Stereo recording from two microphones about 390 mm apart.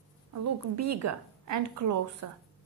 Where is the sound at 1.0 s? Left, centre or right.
Right.